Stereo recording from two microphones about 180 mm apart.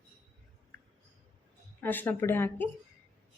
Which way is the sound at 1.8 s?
10° left (ahead or behind).